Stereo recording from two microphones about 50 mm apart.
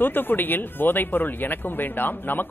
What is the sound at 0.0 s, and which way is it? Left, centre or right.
Speech, left.